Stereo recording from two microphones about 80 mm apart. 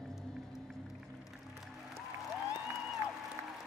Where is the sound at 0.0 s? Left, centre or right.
Centre.